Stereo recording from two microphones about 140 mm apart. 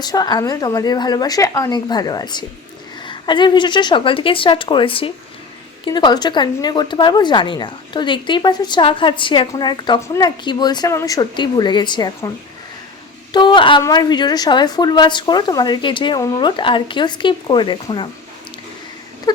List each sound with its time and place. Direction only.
0.0 s a woman's voice: 30° left (ahead or behind)
13.3 s speech: 35° left (ahead or behind)